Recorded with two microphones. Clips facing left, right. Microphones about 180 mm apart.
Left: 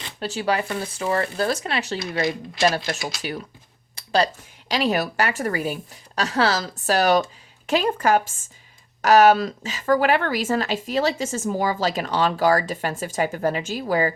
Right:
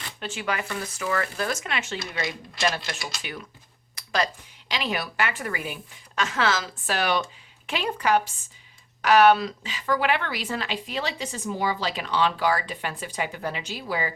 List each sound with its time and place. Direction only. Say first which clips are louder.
0.2 s a woman's voice: left 6 dB; 35° left (ahead or behind)
3.9 s a sound: left 6 dB; 30° left (ahead or behind)
4.7 s a woman's voice: left 7 dB; 40° left (ahead or behind)